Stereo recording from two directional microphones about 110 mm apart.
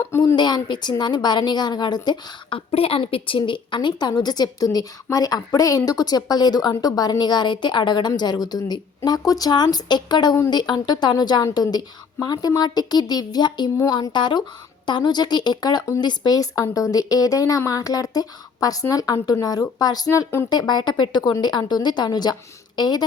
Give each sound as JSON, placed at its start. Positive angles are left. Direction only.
{"t": 0.3, "sound": "speech", "side_deg": 40}
{"t": 2.7, "sound": "a woman's voice", "side_deg": 60}